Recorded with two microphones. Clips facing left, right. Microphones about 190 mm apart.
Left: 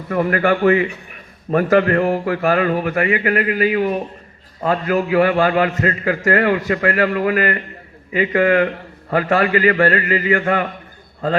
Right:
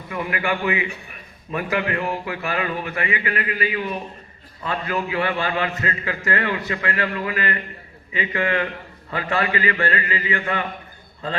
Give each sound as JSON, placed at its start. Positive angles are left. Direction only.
{"t": 0.1, "sound": "a man's voice", "side_deg": 45}